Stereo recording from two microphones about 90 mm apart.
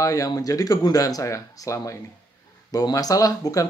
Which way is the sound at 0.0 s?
40° left (ahead or behind).